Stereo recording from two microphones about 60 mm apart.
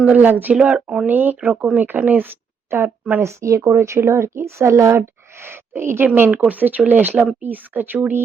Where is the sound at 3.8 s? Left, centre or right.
Right.